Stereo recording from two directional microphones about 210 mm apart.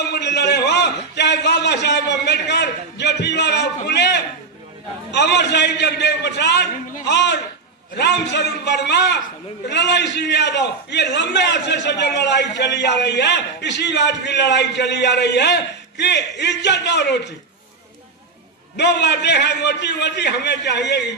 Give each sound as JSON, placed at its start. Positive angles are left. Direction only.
{"t": 0.0, "sound": "a sound", "side_deg": 55}
{"t": 5.1, "sound": "a man's voice", "side_deg": 55}
{"t": 18.8, "sound": "a man's voice", "side_deg": 55}